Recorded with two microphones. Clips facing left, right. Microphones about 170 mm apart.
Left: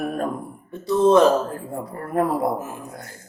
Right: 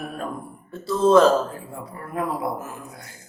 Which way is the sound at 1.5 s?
45° left (ahead or behind).